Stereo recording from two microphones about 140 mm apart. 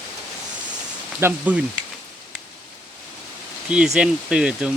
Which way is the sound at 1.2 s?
10° right (ahead or behind).